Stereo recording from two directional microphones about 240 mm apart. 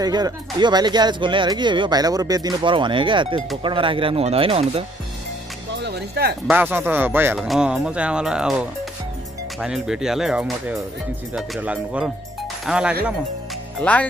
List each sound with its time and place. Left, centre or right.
0.0 s speech: centre
5.8 s speech: right
6.4 s speech: centre